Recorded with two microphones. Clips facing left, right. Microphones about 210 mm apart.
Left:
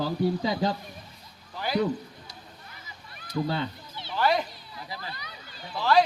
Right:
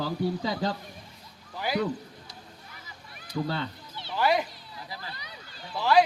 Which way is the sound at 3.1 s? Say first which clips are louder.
Left 2 dB; 15° right (ahead or behind).